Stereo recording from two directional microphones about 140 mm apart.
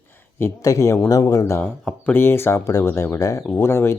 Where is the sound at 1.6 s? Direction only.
10° left (ahead or behind).